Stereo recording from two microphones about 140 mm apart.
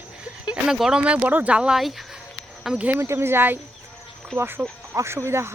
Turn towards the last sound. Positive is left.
turn(degrees=-20)  # may be behind; listen again after turning